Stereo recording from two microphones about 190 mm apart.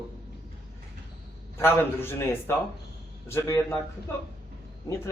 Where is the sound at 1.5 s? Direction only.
10° left (ahead or behind).